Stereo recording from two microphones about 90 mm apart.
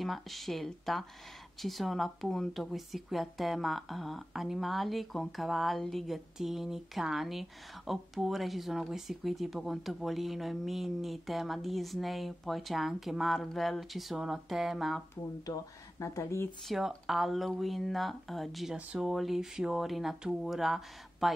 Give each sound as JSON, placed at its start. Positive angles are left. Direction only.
{"t": 0.0, "sound": "speech", "side_deg": 0}
{"t": 15.4, "sound": "speech", "side_deg": 40}
{"t": 16.6, "sound": "speech", "side_deg": -5}